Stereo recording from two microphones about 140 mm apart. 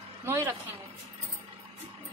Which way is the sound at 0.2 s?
20° right (ahead or behind).